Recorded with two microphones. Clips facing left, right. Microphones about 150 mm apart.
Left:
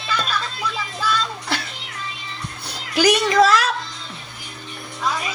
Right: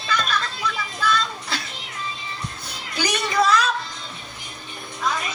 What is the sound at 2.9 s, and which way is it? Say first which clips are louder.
Speech: left 8 dB; 90° left.